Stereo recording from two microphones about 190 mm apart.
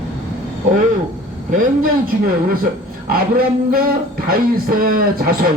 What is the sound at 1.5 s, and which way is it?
Speech, 45° right (ahead or behind).